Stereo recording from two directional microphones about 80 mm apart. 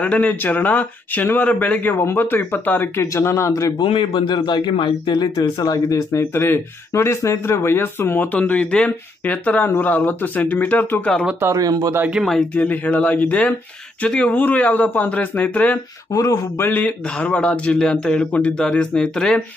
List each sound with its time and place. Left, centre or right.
0.0 s speech: centre
3.0 s speech: left
3.7 s a man's voice: left
6.3 s speech: left
11.5 s speech: right
12.5 s speech: centre
16.1 s speech: left
16.5 s a man's voice: left; by 19.4 s centre